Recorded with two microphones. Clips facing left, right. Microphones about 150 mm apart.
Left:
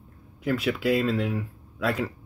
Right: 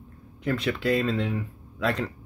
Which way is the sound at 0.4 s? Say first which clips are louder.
Left 1 dB; 5° left (ahead or behind).